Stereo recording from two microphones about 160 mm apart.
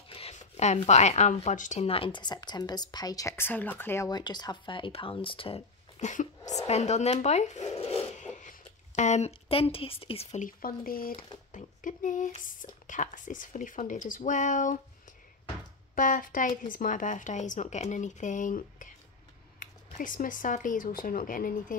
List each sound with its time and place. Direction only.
0.1 s a sound: 40° left (ahead or behind)
0.8 s a woman's voice: 45° left (ahead or behind); by 4.1 s 15° left (ahead or behind)
4.1 s speech: 25° left (ahead or behind)
5.9 s speech: 50° left (ahead or behind)
7.8 s a sound: 40° left (ahead or behind)
8.4 s speech: 50° left (ahead or behind)
10.4 s speech: 65° left (ahead or behind)
15.9 s speech: 60° left (ahead or behind)